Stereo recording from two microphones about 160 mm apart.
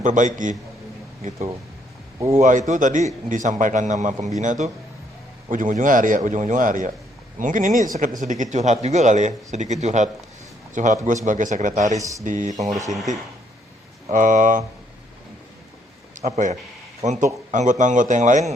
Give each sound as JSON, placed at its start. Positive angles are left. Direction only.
{"t": 0.0, "sound": "speech", "side_deg": -50}
{"t": 2.1, "sound": "a man's voice", "side_deg": -20}
{"t": 2.4, "sound": "a man's voice", "side_deg": -50}
{"t": 11.9, "sound": "speech", "side_deg": -20}
{"t": 12.2, "sound": "speech", "side_deg": -50}
{"t": 14.1, "sound": "speech", "side_deg": -55}
{"t": 16.1, "sound": "speech", "side_deg": -50}